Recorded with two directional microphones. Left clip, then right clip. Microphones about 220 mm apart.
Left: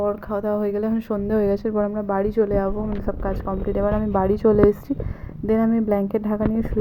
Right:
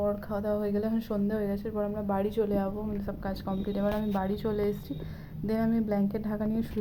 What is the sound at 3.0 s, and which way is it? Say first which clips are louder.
A woman's voice: left 9 dB; 15° left (ahead or behind).